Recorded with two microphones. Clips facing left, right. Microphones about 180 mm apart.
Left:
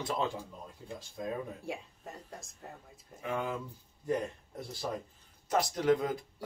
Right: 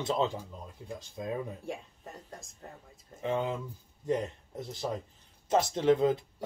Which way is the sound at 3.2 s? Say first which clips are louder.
Right 4 dB; 25° right (ahead or behind).